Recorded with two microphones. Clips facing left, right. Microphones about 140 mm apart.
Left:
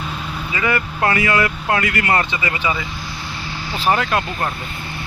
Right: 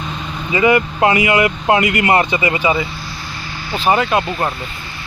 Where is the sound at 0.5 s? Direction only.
15° right (ahead or behind).